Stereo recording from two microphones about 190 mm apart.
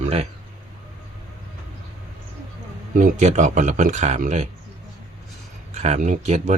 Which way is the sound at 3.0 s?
40° right (ahead or behind).